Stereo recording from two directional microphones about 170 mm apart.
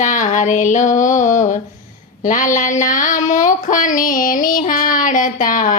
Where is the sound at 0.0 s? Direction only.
50° left (ahead or behind).